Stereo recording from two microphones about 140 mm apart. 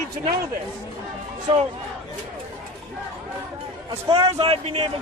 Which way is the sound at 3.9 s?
40° right (ahead or behind).